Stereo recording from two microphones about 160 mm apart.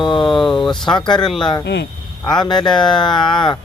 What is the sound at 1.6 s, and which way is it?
Speech, 90° left.